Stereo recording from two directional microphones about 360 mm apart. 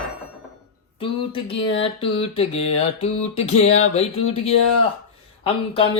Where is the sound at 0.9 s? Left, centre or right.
Centre.